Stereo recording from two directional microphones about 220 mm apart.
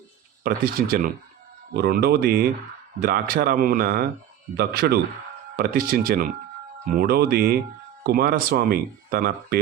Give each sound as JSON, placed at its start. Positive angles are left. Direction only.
{"t": 0.4, "sound": "speech", "side_deg": -40}